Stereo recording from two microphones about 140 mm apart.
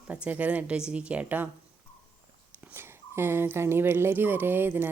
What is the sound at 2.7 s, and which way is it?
A woman's voice, 15° right (ahead or behind).